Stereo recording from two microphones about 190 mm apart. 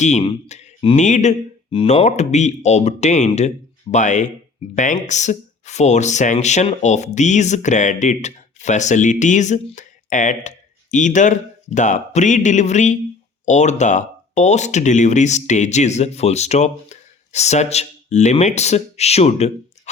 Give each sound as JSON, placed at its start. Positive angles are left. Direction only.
{"t": 0.0, "sound": "speech", "side_deg": 35}